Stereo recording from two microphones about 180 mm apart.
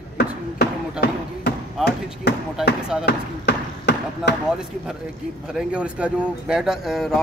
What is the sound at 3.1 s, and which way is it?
Basketball bounce, 70° left (ahead or behind).